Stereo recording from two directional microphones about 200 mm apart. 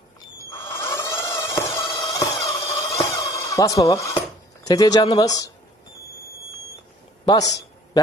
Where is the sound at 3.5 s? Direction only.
15° left (ahead or behind).